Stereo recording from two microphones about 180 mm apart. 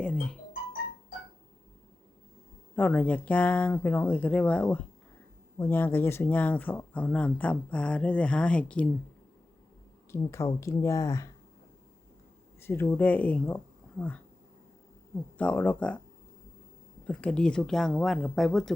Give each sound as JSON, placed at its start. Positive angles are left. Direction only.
{"t": 0.0, "sound": "speech", "side_deg": 5}
{"t": 2.7, "sound": "speech", "side_deg": 10}
{"t": 10.1, "sound": "speech", "side_deg": 15}
{"t": 12.5, "sound": "speech", "side_deg": 10}
{"t": 15.4, "sound": "speech", "side_deg": 10}
{"t": 17.1, "sound": "speech", "side_deg": 5}